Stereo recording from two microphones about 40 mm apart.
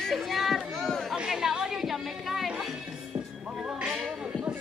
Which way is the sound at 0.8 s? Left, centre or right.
Centre.